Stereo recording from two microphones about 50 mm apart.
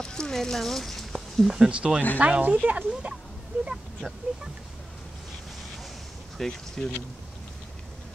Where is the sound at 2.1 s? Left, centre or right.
Right.